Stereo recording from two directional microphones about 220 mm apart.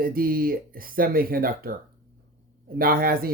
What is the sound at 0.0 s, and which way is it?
Speech, 40° right (ahead or behind).